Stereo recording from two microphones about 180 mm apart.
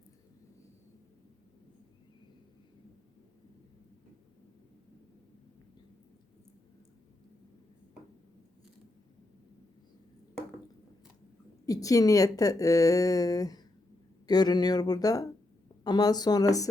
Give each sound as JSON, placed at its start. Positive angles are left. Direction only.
{"t": 11.6, "sound": "a woman's voice", "side_deg": 20}